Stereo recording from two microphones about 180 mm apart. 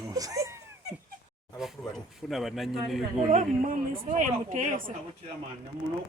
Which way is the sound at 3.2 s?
45° right (ahead or behind).